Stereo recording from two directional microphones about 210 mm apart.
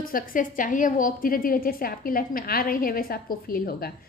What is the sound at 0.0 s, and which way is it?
A woman's voice, 40° left (ahead or behind).